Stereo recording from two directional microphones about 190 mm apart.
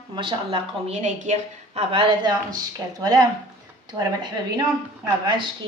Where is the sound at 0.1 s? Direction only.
25° right (ahead or behind).